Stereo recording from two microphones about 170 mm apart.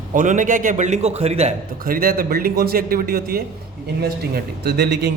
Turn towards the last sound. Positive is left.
turn(degrees=-75)  # may be behind; listen again after turning